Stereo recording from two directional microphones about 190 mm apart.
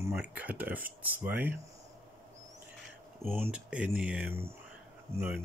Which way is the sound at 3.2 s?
10° right (ahead or behind).